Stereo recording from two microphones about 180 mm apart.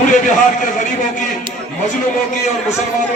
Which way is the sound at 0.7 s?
45° left (ahead or behind).